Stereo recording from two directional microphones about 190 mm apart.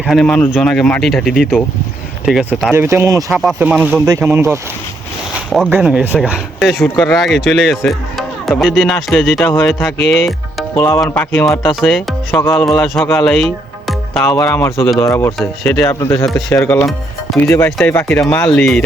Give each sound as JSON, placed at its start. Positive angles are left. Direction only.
{"t": 0.0, "sound": "speech", "side_deg": 0}
{"t": 3.4, "sound": "speech", "side_deg": -5}
{"t": 5.5, "sound": "speech", "side_deg": 0}
{"t": 11.8, "sound": "speech", "side_deg": 0}
{"t": 12.3, "sound": "speech", "side_deg": 10}
{"t": 12.8, "sound": "speech", "side_deg": 0}
{"t": 13.1, "sound": "music", "side_deg": 0}
{"t": 14.4, "sound": "speech", "side_deg": 10}